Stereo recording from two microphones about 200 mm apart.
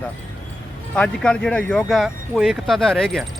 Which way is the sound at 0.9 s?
5° left (ahead or behind).